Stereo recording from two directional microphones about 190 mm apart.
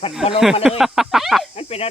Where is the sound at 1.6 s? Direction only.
30° left (ahead or behind).